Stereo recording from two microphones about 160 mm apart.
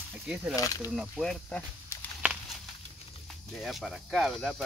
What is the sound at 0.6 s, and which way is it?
Speech, 20° left (ahead or behind).